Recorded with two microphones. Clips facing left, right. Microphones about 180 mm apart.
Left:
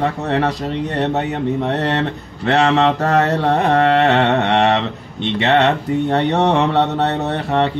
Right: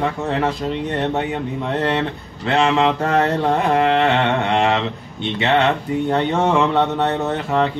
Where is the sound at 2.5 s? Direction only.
40° left (ahead or behind).